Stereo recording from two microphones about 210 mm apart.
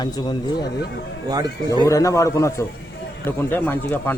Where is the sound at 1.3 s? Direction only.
20° right (ahead or behind).